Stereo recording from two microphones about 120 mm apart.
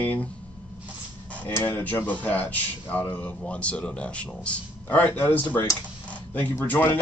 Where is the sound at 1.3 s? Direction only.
10° left (ahead or behind).